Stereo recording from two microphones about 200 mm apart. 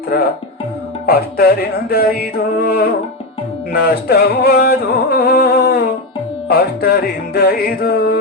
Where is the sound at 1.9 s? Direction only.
50° left (ahead or behind).